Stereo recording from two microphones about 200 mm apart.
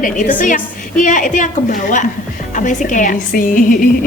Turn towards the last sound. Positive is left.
turn(degrees=45)  # may be behind; listen again after turning